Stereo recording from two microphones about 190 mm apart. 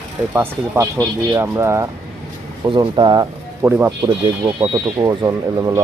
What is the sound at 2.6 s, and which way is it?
Speech, 25° right (ahead or behind).